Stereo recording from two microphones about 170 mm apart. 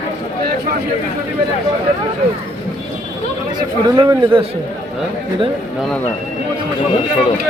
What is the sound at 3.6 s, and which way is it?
Speech, 25° right (ahead or behind).